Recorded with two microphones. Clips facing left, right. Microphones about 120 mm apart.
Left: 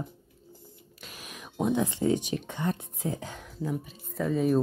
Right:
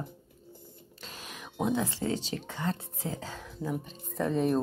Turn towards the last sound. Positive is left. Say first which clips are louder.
# left 2 dB
turn(degrees=5)  # may be behind; listen again after turning